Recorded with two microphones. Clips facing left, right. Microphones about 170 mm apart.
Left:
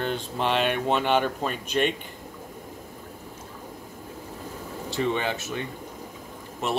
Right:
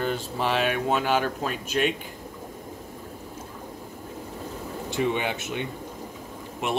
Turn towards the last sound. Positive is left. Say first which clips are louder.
# even
turn(degrees=-15)  # may be behind; listen again after turning